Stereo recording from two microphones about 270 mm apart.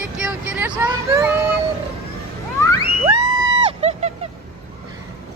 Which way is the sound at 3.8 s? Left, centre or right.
Right.